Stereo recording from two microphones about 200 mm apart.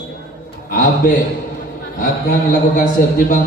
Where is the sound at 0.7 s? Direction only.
45° left (ahead or behind).